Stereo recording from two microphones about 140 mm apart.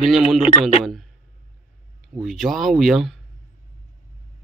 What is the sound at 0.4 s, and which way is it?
Speech, 50° left (ahead or behind).